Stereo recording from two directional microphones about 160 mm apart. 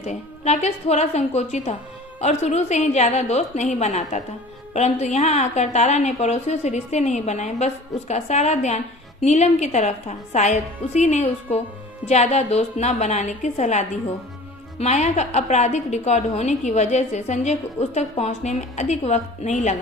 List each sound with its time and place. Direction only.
0.0 s a woman's voice: 45° left (ahead or behind)